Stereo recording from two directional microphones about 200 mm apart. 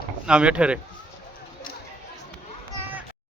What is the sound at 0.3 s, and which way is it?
Speech, 5° right (ahead or behind).